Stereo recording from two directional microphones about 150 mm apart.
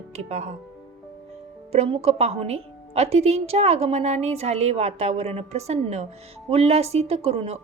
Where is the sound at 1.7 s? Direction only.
45° right (ahead or behind).